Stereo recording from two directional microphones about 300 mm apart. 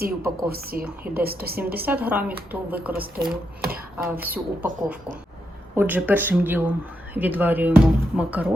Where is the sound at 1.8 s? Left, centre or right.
Centre.